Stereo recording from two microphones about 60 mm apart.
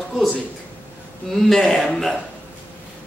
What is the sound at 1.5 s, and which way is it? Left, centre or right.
Speech, centre.